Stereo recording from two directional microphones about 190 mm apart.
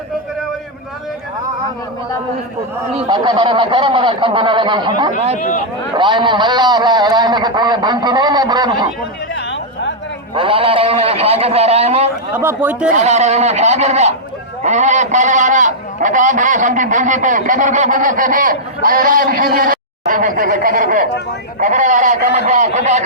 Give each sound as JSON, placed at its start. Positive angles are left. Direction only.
{"t": 2.9, "sound": "a man's voice", "side_deg": -25}
{"t": 5.4, "sound": "speech", "side_deg": 45}
{"t": 6.0, "sound": "a man's voice", "side_deg": -25}
{"t": 9.3, "sound": "a sound", "side_deg": 75}
{"t": 10.3, "sound": "a man's voice", "side_deg": -30}
{"t": 12.3, "sound": "speech", "side_deg": -10}
{"t": 12.9, "sound": "a man's voice", "side_deg": -40}